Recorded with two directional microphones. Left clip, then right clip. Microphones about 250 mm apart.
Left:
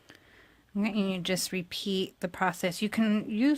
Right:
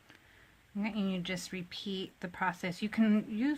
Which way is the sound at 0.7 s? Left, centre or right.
Left.